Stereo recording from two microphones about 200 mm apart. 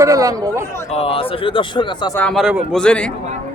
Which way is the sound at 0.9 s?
30° left (ahead or behind).